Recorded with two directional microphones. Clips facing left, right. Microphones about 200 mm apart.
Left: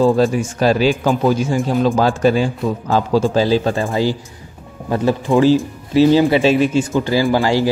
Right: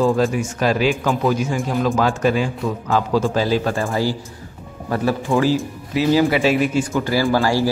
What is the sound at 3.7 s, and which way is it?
Speech, 15° left (ahead or behind).